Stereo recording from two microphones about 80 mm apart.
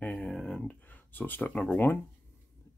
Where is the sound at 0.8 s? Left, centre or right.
Left.